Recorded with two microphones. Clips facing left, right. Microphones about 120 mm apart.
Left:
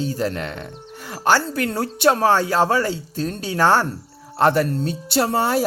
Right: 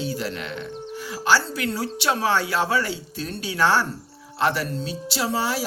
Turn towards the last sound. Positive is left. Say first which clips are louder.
# left 6 dB
turn(degrees=50)  # may be behind; listen again after turning